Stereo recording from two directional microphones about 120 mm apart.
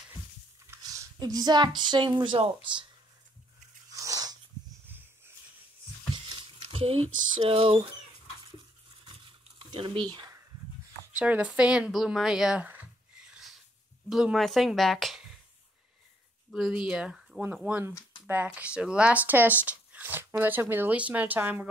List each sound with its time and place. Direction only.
0.8 s speech: 30° right (ahead or behind)
2.3 s speech: 55° right (ahead or behind)
3.9 s sneeze: 30° right (ahead or behind)
4.8 s a sound: 15° right (ahead or behind)
6.3 s speech: 50° right (ahead or behind)
9.0 s a sound: 40° right (ahead or behind)
11.1 s speech: 10° right (ahead or behind)
16.5 s speech: 5° right (ahead or behind)